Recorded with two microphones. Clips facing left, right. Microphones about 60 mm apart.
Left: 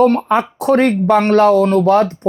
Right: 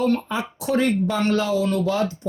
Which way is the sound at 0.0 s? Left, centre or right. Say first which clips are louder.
Left 10 dB; left.